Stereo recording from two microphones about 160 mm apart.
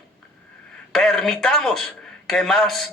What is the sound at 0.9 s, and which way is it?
A woman's voice, 5° left (ahead or behind).